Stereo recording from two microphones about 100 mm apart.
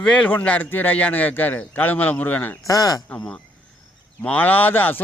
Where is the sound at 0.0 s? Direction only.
10° left (ahead or behind).